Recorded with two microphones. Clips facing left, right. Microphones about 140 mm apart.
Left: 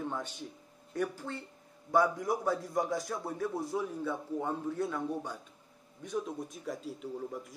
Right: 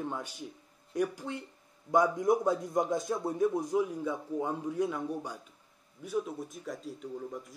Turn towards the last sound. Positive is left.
turn(degrees=0)  # may be behind; listen again after turning